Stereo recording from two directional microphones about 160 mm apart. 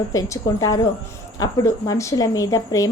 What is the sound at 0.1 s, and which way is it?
A woman's voice, 20° left (ahead or behind).